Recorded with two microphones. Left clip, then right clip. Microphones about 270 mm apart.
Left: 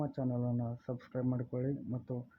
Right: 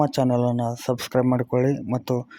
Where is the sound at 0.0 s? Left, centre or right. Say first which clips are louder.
Right 17 dB; right.